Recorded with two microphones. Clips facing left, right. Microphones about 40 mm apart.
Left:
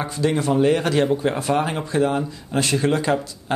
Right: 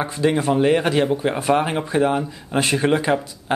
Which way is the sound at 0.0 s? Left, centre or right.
Centre.